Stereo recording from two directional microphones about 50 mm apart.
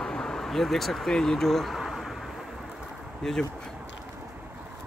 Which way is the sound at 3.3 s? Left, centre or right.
Centre.